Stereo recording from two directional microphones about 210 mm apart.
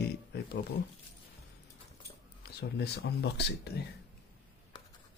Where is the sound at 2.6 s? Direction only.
50° left (ahead or behind).